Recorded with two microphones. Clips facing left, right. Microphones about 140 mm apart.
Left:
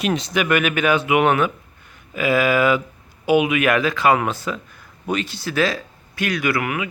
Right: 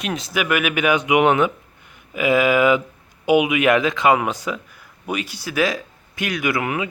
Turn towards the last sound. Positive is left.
turn(degrees=-25)  # may be behind; listen again after turning